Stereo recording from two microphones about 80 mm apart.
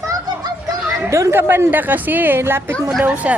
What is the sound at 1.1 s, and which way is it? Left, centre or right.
A woman's voice, right.